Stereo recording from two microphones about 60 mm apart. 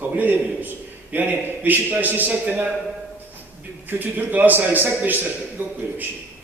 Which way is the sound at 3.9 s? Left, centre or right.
Right.